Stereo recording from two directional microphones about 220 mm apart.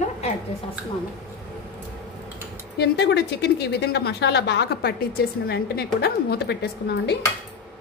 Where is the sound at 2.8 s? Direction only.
50° left (ahead or behind).